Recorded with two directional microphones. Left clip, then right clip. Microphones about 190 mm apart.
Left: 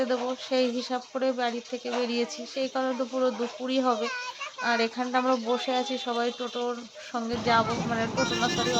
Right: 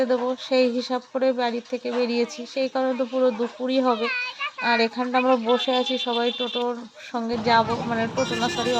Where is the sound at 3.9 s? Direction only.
15° left (ahead or behind).